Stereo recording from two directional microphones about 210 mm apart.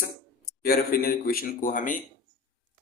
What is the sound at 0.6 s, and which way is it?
Speech, 45° left (ahead or behind).